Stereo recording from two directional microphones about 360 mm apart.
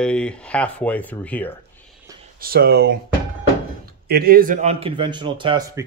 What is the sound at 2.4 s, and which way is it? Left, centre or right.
A man's voice, right.